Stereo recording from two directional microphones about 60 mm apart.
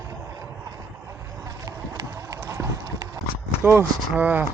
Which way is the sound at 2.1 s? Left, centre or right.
Right.